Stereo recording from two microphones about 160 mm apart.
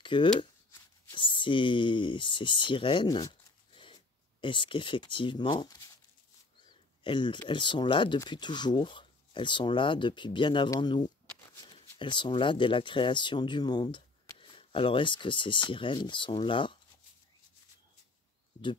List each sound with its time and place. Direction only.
0.0 s speech: 30° left (ahead or behind)
7.0 s speech: 30° left (ahead or behind)